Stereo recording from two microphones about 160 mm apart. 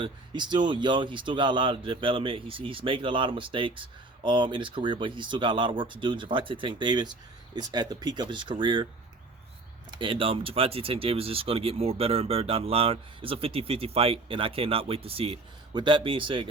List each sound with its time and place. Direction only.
0.0 s speech: 30° right (ahead or behind)
9.9 s speech: 30° right (ahead or behind)